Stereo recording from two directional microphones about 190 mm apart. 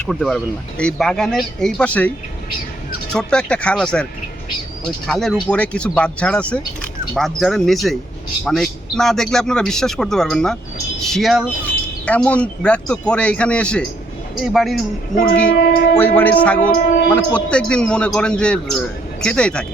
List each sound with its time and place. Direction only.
0.0 s speech: centre (ahead or behind)
5.0 s speech: centre (ahead or behind)
15.5 s speech: 55° left (ahead or behind)
16.0 s speech: 10° left (ahead or behind)
16.7 s speech: 50° left (ahead or behind)
17.1 s speech: 5° left (ahead or behind)